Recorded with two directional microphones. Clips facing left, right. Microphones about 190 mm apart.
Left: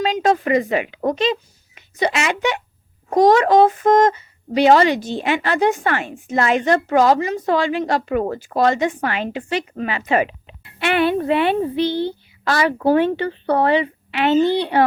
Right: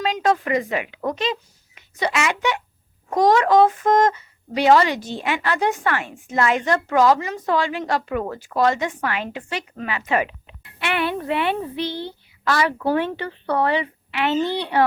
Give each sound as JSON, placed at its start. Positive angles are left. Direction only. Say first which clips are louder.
{"t": 0.0, "sound": "speech", "louder": "left 3 dB", "side_deg": 25}